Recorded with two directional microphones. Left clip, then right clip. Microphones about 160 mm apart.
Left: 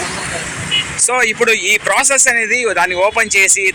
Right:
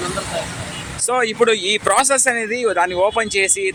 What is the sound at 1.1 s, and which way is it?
A man's voice, 25° right (ahead or behind).